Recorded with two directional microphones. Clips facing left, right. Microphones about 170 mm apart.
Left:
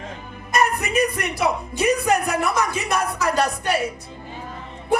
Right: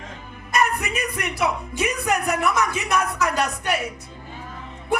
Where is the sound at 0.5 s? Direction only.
35° left (ahead or behind).